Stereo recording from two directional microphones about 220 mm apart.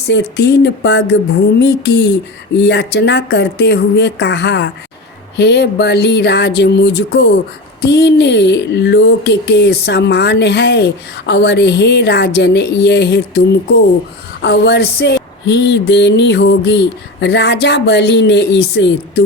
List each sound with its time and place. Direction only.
0.1 s speech: 50° left (ahead or behind)
14.4 s speech: 50° left (ahead or behind)